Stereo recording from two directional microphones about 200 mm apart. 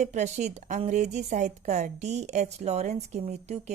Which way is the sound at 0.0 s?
35° right (ahead or behind).